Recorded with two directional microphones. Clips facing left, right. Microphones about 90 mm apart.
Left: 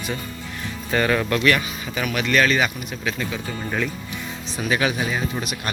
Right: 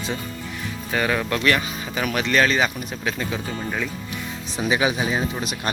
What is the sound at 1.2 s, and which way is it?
Speech, 25° right (ahead or behind).